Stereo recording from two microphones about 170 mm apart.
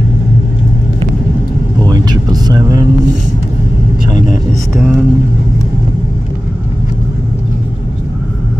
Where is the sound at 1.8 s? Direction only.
25° right (ahead or behind).